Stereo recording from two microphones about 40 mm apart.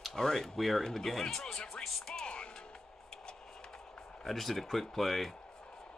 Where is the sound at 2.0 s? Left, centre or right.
Centre.